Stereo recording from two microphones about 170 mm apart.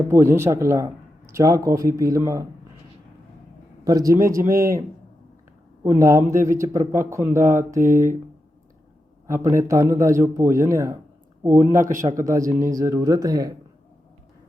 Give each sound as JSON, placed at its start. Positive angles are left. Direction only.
{"t": 0.1, "sound": "a man's voice", "side_deg": -15}
{"t": 3.8, "sound": "speech", "side_deg": -20}
{"t": 5.8, "sound": "a man's voice", "side_deg": -15}
{"t": 9.2, "sound": "a man's voice", "side_deg": -15}
{"t": 11.5, "sound": "speech", "side_deg": -50}
{"t": 12.7, "sound": "speech", "side_deg": -15}